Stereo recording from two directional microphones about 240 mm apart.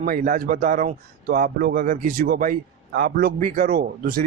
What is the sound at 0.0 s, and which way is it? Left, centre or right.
A man's voice, right.